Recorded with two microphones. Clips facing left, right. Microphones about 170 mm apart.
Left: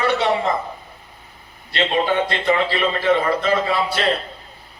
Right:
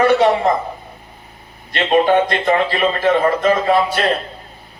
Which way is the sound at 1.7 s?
45° right (ahead or behind).